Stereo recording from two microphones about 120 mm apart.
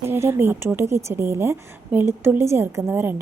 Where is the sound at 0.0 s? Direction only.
20° right (ahead or behind).